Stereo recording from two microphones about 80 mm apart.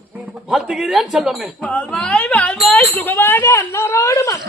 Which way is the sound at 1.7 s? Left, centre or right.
Centre.